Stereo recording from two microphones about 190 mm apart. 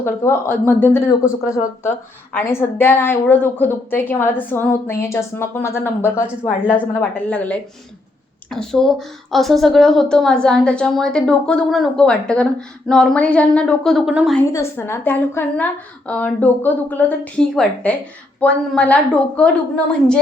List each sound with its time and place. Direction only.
0.0 s a woman's voice: 10° left (ahead or behind); by 14.3 s 5° right (ahead or behind)
14.3 s a woman's voice: 10° left (ahead or behind)